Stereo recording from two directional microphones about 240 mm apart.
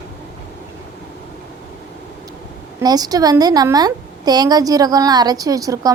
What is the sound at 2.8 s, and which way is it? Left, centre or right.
A woman's voice, centre.